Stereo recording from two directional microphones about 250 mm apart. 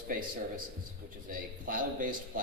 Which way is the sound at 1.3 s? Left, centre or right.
Right.